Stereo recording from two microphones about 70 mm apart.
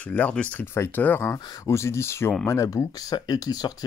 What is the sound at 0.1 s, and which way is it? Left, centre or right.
Speech, centre.